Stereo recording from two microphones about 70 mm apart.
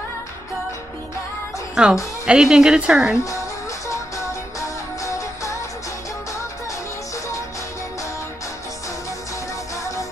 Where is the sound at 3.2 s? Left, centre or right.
Left.